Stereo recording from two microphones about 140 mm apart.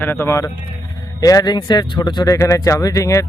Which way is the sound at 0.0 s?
15° left (ahead or behind).